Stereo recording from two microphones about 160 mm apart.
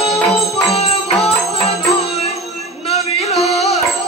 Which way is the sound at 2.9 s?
40° left (ahead or behind).